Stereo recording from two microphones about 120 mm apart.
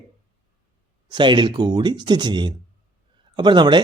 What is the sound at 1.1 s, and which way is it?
A man's voice, 40° right (ahead or behind).